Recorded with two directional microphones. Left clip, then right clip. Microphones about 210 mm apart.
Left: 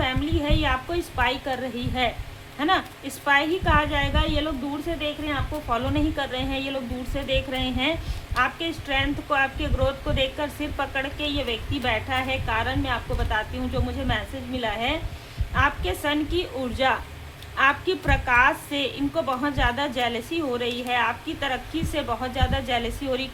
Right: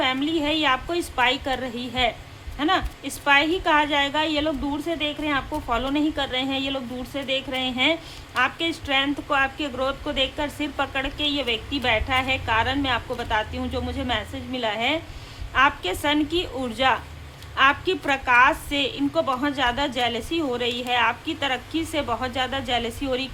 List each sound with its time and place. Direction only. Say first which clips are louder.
0.0 s a woman's voice: right 3 dB; 15° right (ahead or behind)